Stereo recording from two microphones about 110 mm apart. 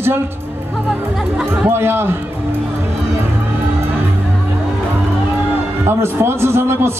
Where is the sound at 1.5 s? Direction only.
20° right (ahead or behind).